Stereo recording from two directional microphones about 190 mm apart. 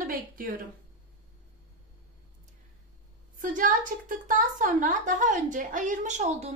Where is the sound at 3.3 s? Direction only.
45° right (ahead or behind).